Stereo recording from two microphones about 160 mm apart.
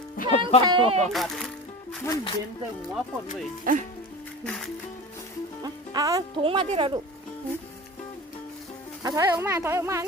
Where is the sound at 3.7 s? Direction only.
60° right (ahead or behind).